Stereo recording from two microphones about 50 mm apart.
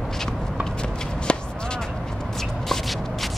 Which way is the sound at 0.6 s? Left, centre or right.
Centre.